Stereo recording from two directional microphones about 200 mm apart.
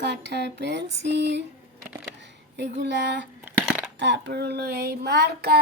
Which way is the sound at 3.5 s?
10° right (ahead or behind).